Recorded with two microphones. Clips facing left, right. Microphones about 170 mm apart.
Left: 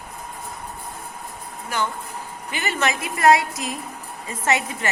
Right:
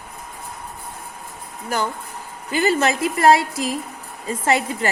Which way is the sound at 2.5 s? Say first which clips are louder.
Right 6 dB; 35° right (ahead or behind).